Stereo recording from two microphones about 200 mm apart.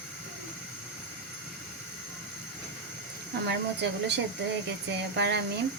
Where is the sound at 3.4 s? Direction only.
60° right (ahead or behind).